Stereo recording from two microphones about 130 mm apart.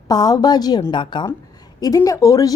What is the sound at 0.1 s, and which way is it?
Speech, 30° left (ahead or behind).